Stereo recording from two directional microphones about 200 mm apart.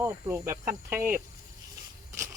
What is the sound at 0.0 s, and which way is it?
Snake, 15° right (ahead or behind).